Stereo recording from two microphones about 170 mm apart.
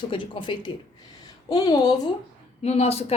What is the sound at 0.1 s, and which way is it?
A woman's voice, 30° left (ahead or behind).